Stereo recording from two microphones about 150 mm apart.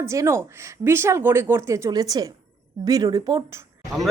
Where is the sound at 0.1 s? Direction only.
20° right (ahead or behind).